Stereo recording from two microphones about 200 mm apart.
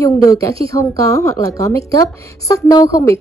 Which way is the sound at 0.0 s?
15° left (ahead or behind).